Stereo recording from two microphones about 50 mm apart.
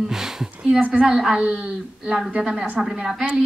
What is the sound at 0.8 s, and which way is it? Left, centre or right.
A woman's voice, right.